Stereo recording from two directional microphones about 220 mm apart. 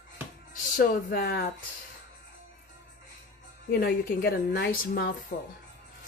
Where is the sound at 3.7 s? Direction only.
45° left (ahead or behind).